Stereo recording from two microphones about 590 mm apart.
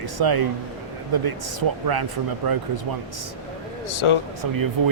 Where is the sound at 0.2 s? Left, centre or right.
Right.